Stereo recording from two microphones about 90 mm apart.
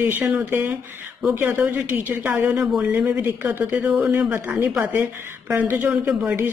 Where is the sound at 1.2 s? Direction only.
25° right (ahead or behind).